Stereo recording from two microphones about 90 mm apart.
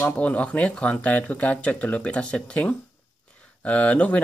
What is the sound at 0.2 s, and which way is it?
Speech, 15° left (ahead or behind).